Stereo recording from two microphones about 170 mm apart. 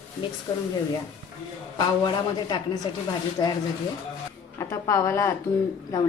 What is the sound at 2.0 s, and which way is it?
A woman's voice, 25° left (ahead or behind).